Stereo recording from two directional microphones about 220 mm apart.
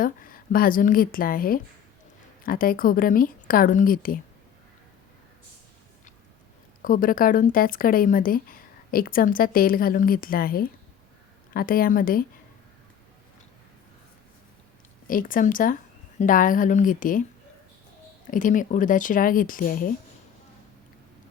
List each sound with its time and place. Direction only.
0.0 s speech: 40° left (ahead or behind)
6.8 s speech: 40° left (ahead or behind)
15.0 s a woman's voice: 40° left (ahead or behind)
18.3 s speech: 35° left (ahead or behind)